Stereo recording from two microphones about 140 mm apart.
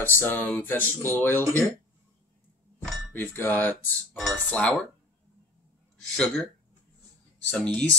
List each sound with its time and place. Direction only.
0.0 s speech: 15° left (ahead or behind)
1.4 s speech: 20° right (ahead or behind)
3.1 s speech: 15° left (ahead or behind)
6.0 s speech: 5° left (ahead or behind)
7.5 s speech: 5° left (ahead or behind)